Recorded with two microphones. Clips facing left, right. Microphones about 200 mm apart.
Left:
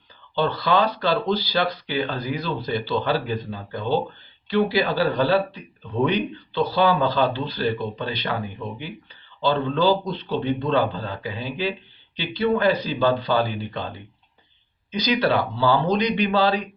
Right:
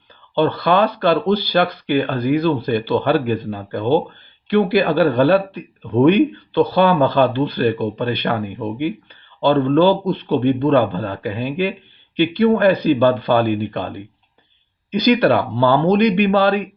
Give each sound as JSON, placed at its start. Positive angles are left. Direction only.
{"t": 0.3, "sound": "speech", "side_deg": -60}